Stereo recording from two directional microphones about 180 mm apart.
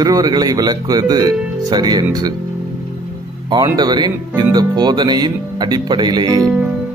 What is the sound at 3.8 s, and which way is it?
Speech, 25° right (ahead or behind).